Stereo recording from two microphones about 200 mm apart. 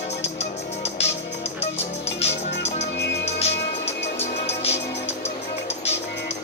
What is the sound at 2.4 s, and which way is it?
Music, 30° left (ahead or behind).